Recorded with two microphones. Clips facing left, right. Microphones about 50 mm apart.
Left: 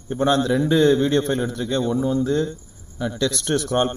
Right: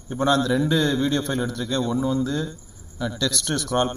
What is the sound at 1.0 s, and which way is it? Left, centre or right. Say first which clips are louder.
Speech: left 3 dB; left.